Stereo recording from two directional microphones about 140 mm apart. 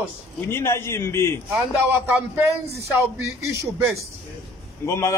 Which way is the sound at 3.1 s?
20° right (ahead or behind).